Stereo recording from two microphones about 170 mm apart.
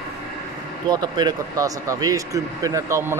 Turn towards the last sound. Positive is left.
turn(degrees=-15)  # may be behind; listen again after turning